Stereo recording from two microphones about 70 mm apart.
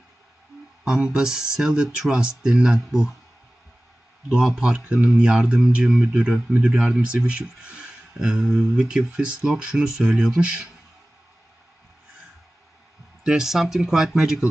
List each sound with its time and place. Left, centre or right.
0.9 s speech: centre
4.3 s speech: centre
13.2 s speech: centre